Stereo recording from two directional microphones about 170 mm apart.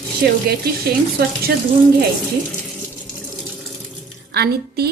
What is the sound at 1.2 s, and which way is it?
Frying, 65° right (ahead or behind).